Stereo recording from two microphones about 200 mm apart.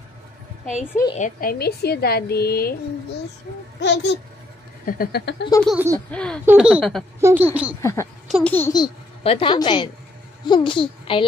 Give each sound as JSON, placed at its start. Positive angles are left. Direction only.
{"t": 1.1, "sound": "a woman's voice", "side_deg": 40}
{"t": 3.8, "sound": "a child's voice", "side_deg": 60}
{"t": 4.8, "sound": "a woman's voice", "side_deg": 45}
{"t": 5.7, "sound": "a woman's voice", "side_deg": -10}
{"t": 6.1, "sound": "speech", "side_deg": 5}
{"t": 6.4, "sound": "speech", "side_deg": -5}
{"t": 7.2, "sound": "a woman's voice", "side_deg": -10}
{"t": 7.8, "sound": "a woman's voice", "side_deg": 15}
{"t": 8.3, "sound": "a child's voice", "side_deg": 0}
{"t": 8.5, "sound": "a child's voice", "side_deg": 15}